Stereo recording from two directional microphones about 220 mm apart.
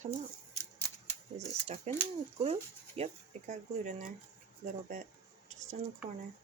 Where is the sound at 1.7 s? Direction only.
30° right (ahead or behind).